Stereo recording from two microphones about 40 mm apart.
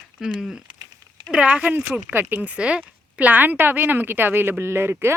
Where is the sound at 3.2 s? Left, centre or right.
Right.